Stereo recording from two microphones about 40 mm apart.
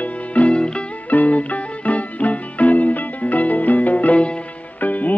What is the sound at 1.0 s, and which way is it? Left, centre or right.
Music, left.